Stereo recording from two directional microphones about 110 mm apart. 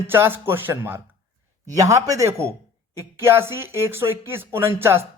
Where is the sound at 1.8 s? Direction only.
30° right (ahead or behind).